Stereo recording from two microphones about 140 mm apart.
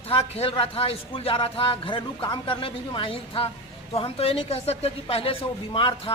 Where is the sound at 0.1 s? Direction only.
45° left (ahead or behind).